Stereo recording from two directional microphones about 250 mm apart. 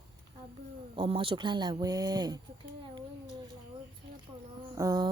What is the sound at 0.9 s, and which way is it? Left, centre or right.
Speech, centre.